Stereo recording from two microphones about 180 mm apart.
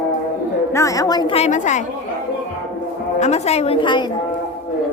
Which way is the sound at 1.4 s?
40° left (ahead or behind).